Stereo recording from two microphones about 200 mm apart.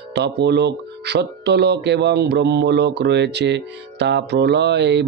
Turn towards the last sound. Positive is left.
turn(degrees=-60)  # may be behind; listen again after turning